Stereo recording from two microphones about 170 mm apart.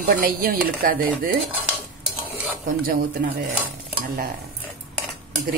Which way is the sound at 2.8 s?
55° right (ahead or behind).